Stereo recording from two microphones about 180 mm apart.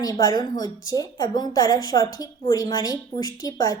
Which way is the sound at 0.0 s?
20° left (ahead or behind).